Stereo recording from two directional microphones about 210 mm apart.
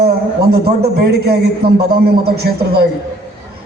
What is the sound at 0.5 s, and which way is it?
A man's voice, 50° right (ahead or behind).